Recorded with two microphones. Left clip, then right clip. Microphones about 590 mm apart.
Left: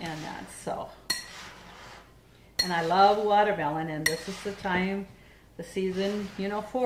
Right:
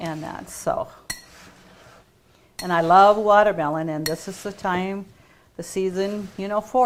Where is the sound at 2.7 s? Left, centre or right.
Right.